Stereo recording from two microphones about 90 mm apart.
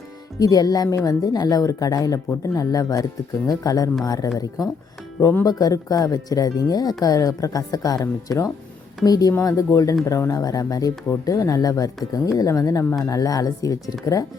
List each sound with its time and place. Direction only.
0.3 s speech: 45° left (ahead or behind)